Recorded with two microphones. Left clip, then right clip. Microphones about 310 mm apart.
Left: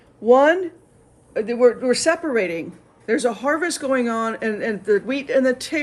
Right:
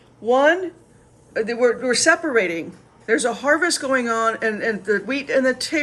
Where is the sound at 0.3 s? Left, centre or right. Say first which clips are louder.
Left 2 dB; centre.